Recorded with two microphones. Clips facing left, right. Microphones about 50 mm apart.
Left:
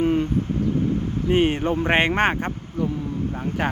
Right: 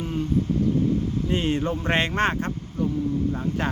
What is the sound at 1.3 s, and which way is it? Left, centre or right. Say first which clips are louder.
Speech: left 6 dB; left.